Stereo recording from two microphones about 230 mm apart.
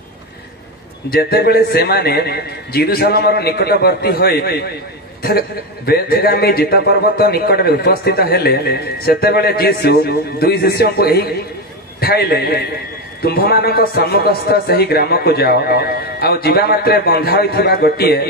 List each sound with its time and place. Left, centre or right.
1.1 s a man's voice: left
5.9 s a man's voice: left